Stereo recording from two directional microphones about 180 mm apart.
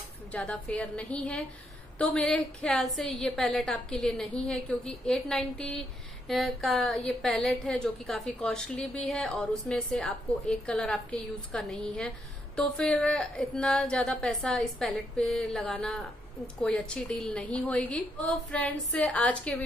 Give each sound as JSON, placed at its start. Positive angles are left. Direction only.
{"t": 0.3, "sound": "a woman's voice", "side_deg": 5}